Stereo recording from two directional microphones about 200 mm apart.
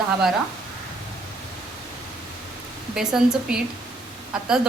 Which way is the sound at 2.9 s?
5° right (ahead or behind).